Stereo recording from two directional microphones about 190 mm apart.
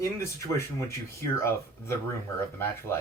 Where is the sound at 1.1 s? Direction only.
15° left (ahead or behind).